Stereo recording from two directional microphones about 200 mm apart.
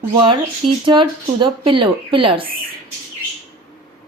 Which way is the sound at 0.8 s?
25° right (ahead or behind).